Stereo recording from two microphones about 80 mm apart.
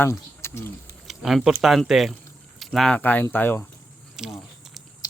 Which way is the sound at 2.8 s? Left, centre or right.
Centre.